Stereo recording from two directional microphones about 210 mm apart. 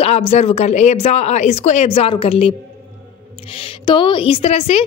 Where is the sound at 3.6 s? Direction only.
25° left (ahead or behind).